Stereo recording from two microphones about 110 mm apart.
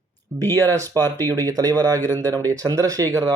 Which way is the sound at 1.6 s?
35° right (ahead or behind).